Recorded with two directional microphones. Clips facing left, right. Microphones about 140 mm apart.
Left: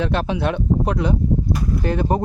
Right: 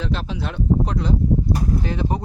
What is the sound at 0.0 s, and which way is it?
Speech, 60° left (ahead or behind).